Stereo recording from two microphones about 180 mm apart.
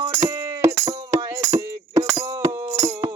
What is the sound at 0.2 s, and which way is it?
Music, 15° right (ahead or behind).